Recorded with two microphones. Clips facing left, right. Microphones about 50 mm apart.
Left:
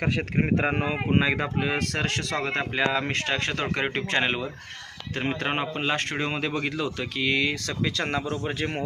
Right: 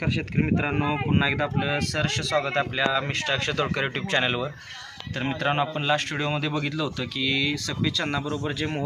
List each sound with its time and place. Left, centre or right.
0.0 s a man's voice: left
8.3 s a man's voice: left